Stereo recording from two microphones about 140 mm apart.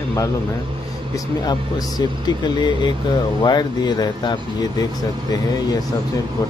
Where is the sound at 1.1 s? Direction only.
30° left (ahead or behind).